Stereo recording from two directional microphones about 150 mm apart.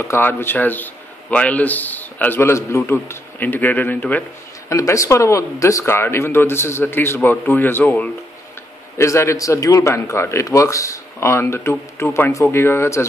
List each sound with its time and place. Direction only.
0.0 s a man's voice: 15° left (ahead or behind)